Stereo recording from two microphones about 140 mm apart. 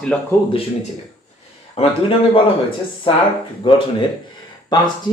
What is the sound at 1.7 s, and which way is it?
Speech, 40° left (ahead or behind).